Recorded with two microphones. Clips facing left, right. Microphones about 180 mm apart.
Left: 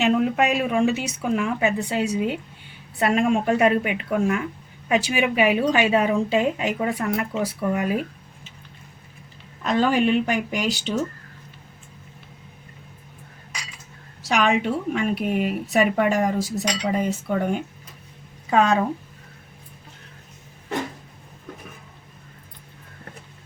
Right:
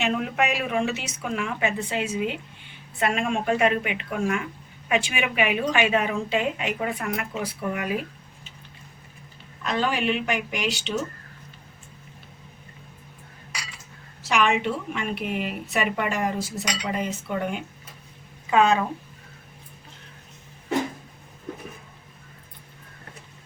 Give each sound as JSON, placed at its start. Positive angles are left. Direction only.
{"t": 0.0, "sound": "a woman's voice", "side_deg": 35}
{"t": 9.6, "sound": "a woman's voice", "side_deg": 45}
{"t": 14.3, "sound": "a woman's voice", "side_deg": 40}